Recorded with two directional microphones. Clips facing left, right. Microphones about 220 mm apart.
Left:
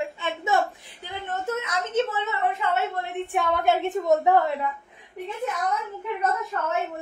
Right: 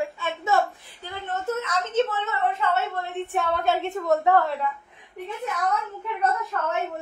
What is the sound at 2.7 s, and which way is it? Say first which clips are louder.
A woman's voice: even; 15° left (ahead or behind).